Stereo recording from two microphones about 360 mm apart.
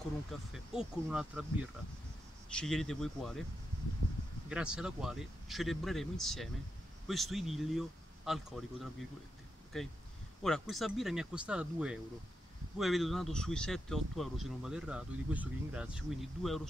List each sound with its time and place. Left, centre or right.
0.3 s speech: centre
2.5 s speech: centre
4.5 s speech: centre